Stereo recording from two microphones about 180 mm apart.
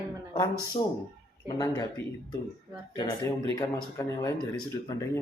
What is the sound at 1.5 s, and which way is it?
Speech, 15° left (ahead or behind).